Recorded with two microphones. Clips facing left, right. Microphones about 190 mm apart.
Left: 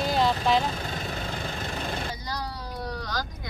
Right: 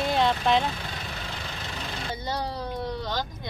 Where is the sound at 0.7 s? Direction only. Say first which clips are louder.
Left 4 dB; 45° left (ahead or behind).